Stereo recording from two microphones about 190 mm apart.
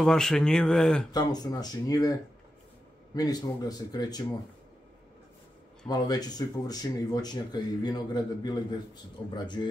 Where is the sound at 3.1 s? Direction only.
20° left (ahead or behind).